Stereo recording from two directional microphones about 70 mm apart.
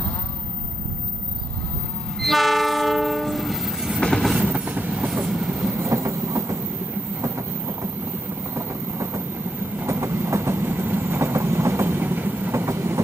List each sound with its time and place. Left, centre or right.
2.2 s train: centre
4.5 s train: centre
5.2 s train: centre
5.8 s train: right
8.5 s vehicle: right
9.8 s train: right
12.5 s train: right